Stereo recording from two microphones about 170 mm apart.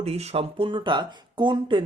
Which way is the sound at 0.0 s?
40° right (ahead or behind).